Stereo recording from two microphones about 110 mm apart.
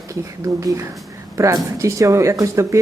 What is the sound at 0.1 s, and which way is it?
Speech, 30° right (ahead or behind).